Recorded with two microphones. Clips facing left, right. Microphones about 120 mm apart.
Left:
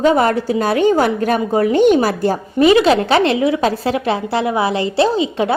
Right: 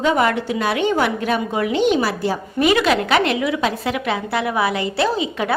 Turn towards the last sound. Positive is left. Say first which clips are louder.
# left 5 dB
turn(degrees=25)  # may be behind; listen again after turning